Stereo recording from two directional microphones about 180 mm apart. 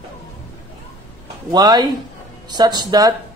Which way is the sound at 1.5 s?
20° right (ahead or behind).